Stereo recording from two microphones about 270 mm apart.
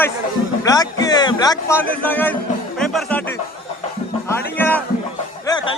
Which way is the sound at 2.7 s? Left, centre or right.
Centre.